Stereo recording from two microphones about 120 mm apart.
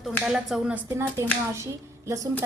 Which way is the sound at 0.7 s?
20° right (ahead or behind).